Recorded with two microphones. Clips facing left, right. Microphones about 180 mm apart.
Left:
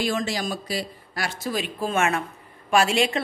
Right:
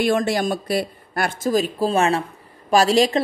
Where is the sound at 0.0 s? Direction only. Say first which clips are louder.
Right 6 dB; 55° right (ahead or behind).